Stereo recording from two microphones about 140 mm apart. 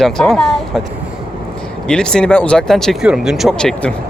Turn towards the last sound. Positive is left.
turn(degrees=5)  # may be behind; listen again after turning